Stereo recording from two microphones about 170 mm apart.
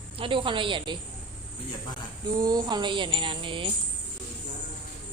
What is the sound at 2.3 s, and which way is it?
Music, 20° right (ahead or behind).